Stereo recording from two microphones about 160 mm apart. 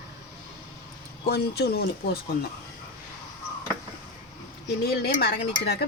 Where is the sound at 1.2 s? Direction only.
90° left.